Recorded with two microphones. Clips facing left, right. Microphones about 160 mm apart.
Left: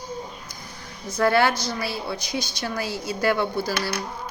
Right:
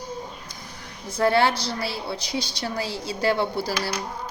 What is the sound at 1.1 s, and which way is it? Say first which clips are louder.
A woman's voice: even; 25° right (ahead or behind).